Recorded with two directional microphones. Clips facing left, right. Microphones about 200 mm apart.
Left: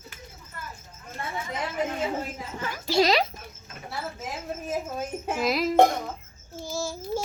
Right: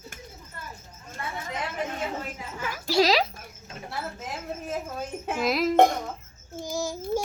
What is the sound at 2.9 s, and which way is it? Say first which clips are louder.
Speech: even; centre (ahead or behind).